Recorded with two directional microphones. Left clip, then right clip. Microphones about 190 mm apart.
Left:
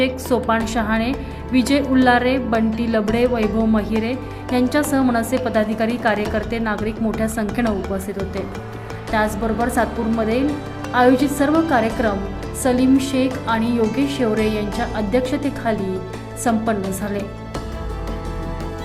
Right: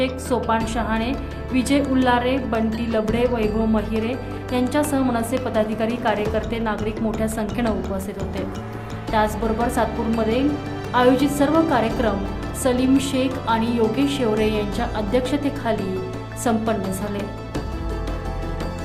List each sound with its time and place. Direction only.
0.0 s a woman's voice: 20° left (ahead or behind)
9.1 s a woman's voice: 10° left (ahead or behind)